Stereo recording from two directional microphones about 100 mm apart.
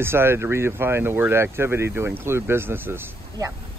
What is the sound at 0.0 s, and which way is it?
Speech, 25° right (ahead or behind).